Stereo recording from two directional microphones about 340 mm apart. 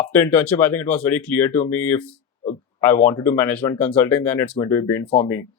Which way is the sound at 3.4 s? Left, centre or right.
Centre.